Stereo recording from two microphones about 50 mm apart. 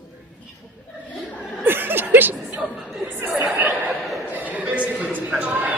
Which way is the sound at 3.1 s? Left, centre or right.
Right.